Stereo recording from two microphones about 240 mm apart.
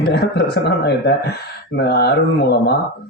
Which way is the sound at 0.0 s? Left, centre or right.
Left.